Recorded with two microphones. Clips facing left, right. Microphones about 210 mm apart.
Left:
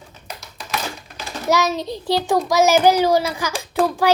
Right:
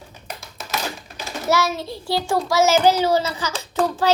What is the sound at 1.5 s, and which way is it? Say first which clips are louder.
A child's voice: left 2 dB; 20° left (ahead or behind).